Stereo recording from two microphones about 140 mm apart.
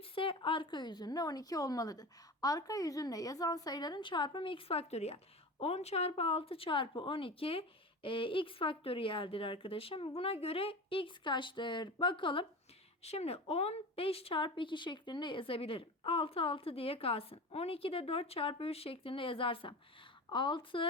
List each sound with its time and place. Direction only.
0.1 s speech: 40° left (ahead or behind)
13.0 s speech: 50° left (ahead or behind)